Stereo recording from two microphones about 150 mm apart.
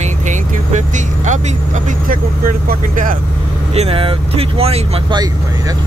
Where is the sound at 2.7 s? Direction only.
65° right (ahead or behind).